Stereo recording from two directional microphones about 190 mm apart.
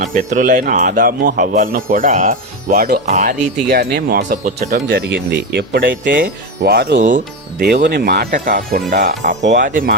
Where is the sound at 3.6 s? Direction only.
60° right (ahead or behind).